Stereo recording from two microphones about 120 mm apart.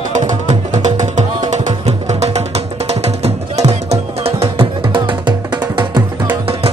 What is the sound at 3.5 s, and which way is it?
Music, 65° right (ahead or behind).